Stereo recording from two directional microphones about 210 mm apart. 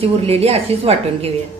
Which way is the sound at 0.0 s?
30° right (ahead or behind).